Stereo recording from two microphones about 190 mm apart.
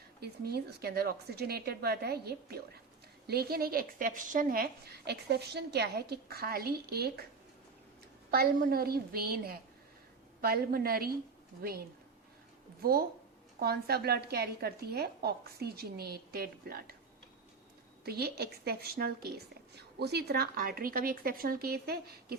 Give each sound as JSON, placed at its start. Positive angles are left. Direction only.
{"t": 0.2, "sound": "a woman's voice", "side_deg": -55}
{"t": 8.3, "sound": "a woman's voice", "side_deg": -50}
{"t": 12.8, "sound": "a woman's voice", "side_deg": -50}
{"t": 18.0, "sound": "a woman's voice", "side_deg": -55}